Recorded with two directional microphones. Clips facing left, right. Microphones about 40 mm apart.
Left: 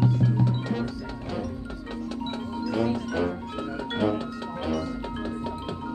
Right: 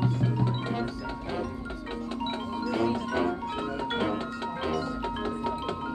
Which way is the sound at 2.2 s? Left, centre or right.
Right.